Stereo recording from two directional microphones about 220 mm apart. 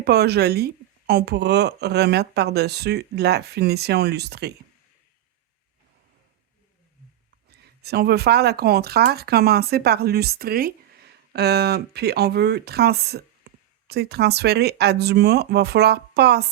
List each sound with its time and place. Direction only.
0.0 s speech: 50° right (ahead or behind)
7.5 s speech: 45° right (ahead or behind)